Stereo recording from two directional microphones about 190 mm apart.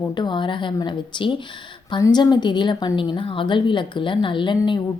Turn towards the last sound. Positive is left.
turn(degrees=25)  # may be behind; listen again after turning